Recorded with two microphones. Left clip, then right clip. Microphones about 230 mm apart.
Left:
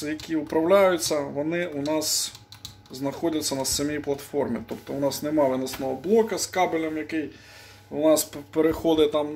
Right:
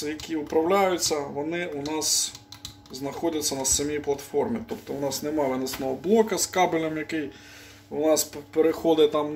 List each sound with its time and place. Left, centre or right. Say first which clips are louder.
0.0 s speech: left 2 dB; centre
5.9 s speech: even; centre
8.0 s speech: left 2 dB; left; by 9.3 s centre